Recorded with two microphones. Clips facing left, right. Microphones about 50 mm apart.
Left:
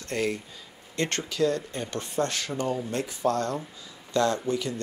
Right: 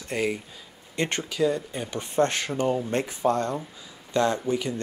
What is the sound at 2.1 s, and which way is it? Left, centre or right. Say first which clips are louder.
Speech: right 5 dB; right.